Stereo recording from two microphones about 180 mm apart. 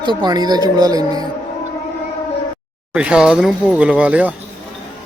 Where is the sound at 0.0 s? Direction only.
25° right (ahead or behind).